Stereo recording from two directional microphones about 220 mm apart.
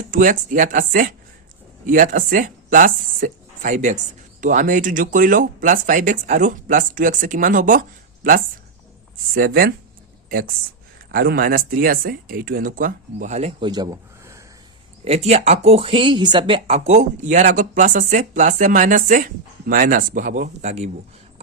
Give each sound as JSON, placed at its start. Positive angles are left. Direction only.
{"t": 0.1, "sound": "speech", "side_deg": -35}
{"t": 13.7, "sound": "a sound", "side_deg": -20}
{"t": 15.0, "sound": "speech", "side_deg": -30}